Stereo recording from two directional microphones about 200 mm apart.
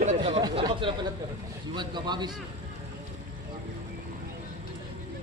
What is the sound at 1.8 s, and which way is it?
Speech, 20° right (ahead or behind).